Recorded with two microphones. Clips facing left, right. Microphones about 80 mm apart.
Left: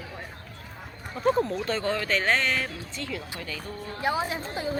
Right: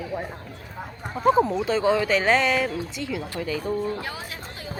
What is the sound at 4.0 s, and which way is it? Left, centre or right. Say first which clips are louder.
Speech: left 7 dB; left.